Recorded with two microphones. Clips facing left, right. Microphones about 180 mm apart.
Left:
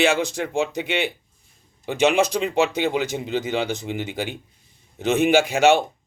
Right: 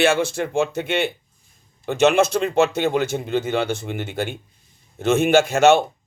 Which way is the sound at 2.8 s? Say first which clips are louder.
Right 2 dB; 55° right (ahead or behind).